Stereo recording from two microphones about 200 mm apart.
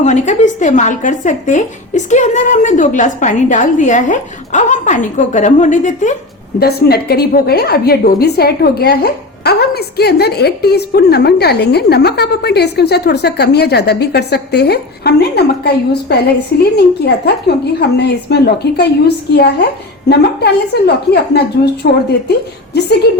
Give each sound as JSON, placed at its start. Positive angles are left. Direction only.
{"t": 0.0, "sound": "a woman's voice", "side_deg": 35}
{"t": 6.6, "sound": "a woman's voice", "side_deg": 50}